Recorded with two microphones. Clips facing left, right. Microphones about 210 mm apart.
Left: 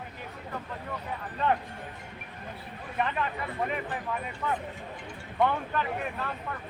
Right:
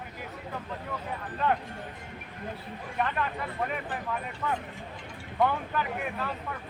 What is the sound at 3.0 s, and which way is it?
Speech, 5° left (ahead or behind).